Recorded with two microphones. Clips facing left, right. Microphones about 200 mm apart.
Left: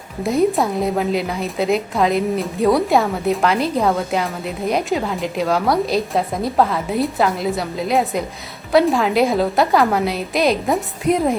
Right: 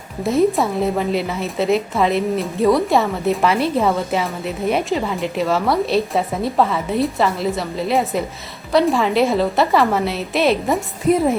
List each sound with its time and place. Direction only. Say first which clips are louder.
0.2 s a woman's voice: right 1 dB; centre (ahead or behind)